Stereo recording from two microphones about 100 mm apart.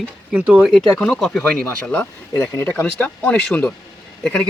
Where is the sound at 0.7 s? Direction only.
5° left (ahead or behind).